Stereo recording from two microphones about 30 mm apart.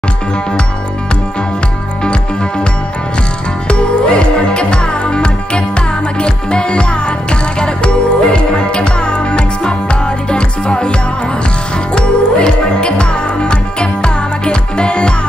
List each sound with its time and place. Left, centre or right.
3.6 s music: left